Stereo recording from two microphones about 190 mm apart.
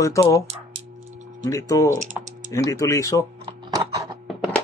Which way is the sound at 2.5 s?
15° left (ahead or behind).